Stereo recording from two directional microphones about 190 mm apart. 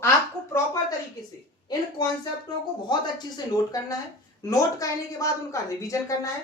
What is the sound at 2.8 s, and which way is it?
A woman's voice, 20° left (ahead or behind).